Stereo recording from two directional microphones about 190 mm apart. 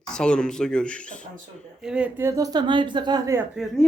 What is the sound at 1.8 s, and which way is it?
A woman's voice, 5° right (ahead or behind).